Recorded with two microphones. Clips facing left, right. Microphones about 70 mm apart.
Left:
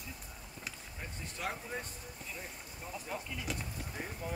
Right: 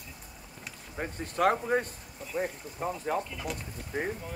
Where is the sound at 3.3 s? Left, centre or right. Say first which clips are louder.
Right 4 dB; centre.